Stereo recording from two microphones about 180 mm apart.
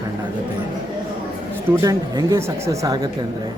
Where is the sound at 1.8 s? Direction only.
20° right (ahead or behind).